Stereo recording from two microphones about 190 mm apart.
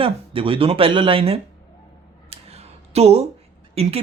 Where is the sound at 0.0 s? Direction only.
30° right (ahead or behind).